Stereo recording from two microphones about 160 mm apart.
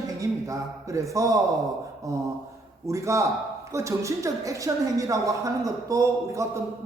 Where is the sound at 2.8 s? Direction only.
20° right (ahead or behind).